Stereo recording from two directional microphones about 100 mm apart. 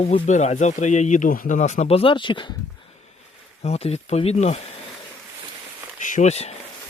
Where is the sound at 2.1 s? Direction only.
55° left (ahead or behind).